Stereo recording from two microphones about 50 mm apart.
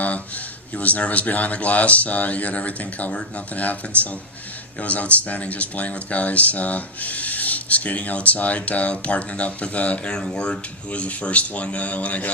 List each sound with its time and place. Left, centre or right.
0.0 s speech: left